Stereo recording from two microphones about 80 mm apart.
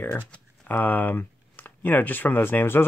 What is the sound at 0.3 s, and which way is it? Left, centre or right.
Speech, left.